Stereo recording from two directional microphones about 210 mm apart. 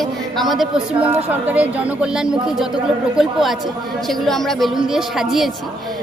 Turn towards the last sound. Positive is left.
turn(degrees=0)  # may be behind; listen again after turning